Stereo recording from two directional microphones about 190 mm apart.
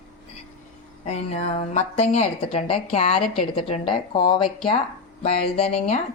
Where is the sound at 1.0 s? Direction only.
35° left (ahead or behind).